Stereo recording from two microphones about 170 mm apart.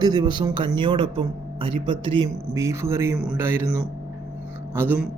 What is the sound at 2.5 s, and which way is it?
A man's voice, 15° right (ahead or behind).